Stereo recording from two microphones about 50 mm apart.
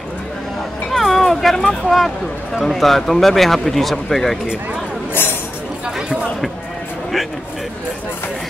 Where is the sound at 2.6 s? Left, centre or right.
Centre.